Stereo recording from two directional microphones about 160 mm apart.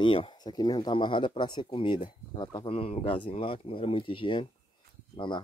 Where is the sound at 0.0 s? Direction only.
30° left (ahead or behind).